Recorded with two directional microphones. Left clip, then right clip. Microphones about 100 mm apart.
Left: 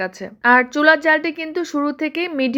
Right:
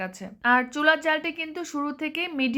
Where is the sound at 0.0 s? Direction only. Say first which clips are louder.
Left 8 dB; 35° left (ahead or behind).